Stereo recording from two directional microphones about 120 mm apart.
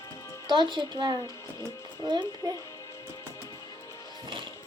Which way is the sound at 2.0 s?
35° right (ahead or behind).